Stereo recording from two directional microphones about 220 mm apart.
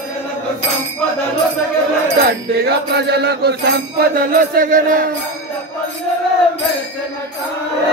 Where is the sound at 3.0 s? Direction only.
45° right (ahead or behind).